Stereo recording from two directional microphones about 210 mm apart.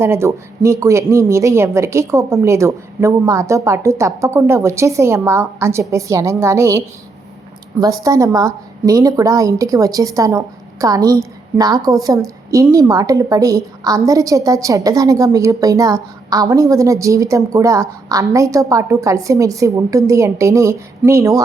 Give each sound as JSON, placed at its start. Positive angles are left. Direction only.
{"t": 0.0, "sound": "a woman's voice", "side_deg": -10}